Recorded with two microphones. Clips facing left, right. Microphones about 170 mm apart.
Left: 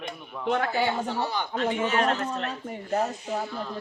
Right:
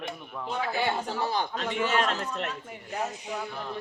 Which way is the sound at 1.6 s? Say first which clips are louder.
Left 4 dB; 35° left (ahead or behind).